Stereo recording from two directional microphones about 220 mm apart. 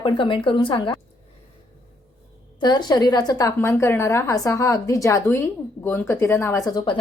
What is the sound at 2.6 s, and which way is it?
A woman's voice, 20° left (ahead or behind).